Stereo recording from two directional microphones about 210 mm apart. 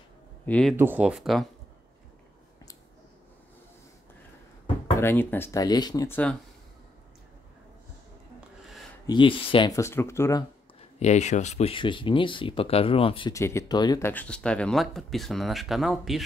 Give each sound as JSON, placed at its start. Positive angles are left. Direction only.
{"t": 0.5, "sound": "speech", "side_deg": 5}
{"t": 0.7, "sound": "speech", "side_deg": -10}
{"t": 5.0, "sound": "speech", "side_deg": 10}
{"t": 9.0, "sound": "speech", "side_deg": 20}
{"t": 11.0, "sound": "speech", "side_deg": 35}